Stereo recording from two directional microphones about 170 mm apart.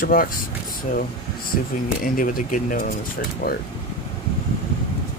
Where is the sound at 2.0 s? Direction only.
55° left (ahead or behind).